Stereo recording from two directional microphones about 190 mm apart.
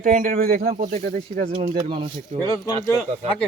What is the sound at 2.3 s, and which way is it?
Speech, 40° right (ahead or behind).